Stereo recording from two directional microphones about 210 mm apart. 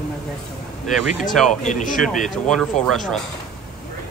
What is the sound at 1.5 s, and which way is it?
Speech, 35° left (ahead or behind).